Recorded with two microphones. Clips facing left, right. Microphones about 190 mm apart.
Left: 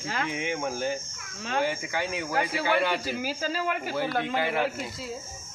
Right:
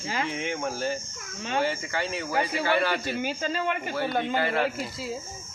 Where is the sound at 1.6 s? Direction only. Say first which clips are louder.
Even; 10° left (ahead or behind).